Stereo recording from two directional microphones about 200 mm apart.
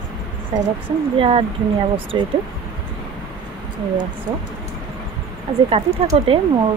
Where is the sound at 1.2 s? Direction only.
25° right (ahead or behind).